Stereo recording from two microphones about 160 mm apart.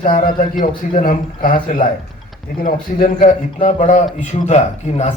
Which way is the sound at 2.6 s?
60° left (ahead or behind).